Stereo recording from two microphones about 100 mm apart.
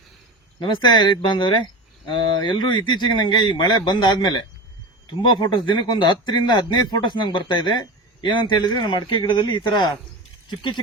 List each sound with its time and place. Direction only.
0.6 s speech: 50° left (ahead or behind)